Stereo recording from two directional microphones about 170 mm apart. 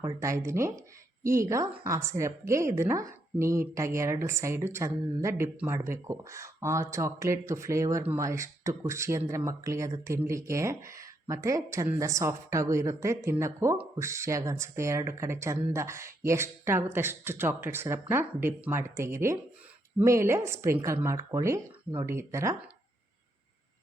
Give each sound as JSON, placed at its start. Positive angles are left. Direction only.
{"t": 0.0, "sound": "a woman's voice", "side_deg": -20}